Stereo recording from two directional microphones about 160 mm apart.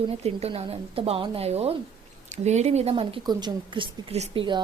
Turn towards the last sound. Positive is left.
turn(degrees=-30)  # may be behind; listen again after turning